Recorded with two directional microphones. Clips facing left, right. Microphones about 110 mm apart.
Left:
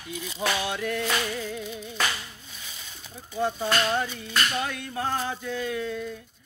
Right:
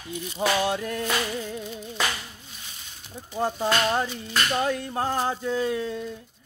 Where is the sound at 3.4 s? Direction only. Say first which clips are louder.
Right 1 dB; 35° right (ahead or behind).